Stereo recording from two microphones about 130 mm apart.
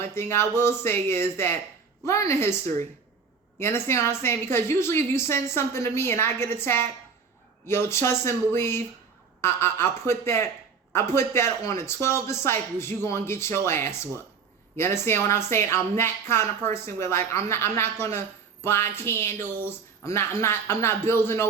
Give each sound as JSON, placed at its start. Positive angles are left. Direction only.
{"t": 0.0, "sound": "a woman's voice", "side_deg": 20}
{"t": 3.6, "sound": "a woman's voice", "side_deg": 20}